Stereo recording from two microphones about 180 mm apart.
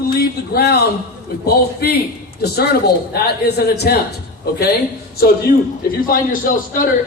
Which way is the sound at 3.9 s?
55° left (ahead or behind).